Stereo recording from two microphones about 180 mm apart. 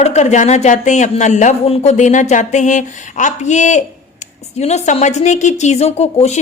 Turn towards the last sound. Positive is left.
turn(degrees=35)  # may be behind; listen again after turning